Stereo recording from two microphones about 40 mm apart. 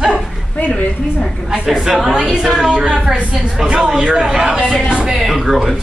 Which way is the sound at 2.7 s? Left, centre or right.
Right.